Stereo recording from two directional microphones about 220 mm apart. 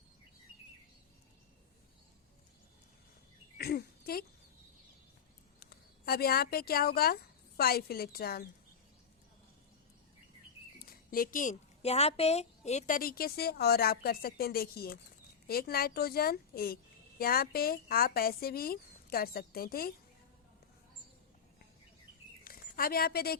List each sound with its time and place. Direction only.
3.6 s a sound: 45° left (ahead or behind)
6.1 s a woman's voice: 45° left (ahead or behind)
10.8 s a woman's voice: 40° left (ahead or behind)
22.4 s speech: 40° left (ahead or behind)